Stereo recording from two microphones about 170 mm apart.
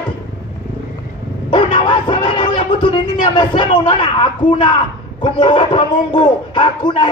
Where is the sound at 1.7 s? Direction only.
25° left (ahead or behind).